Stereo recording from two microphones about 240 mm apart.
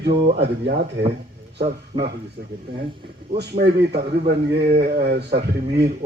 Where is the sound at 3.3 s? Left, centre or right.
Right.